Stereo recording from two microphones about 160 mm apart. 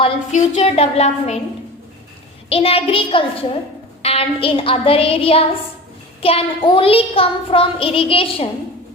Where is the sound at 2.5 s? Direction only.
35° left (ahead or behind).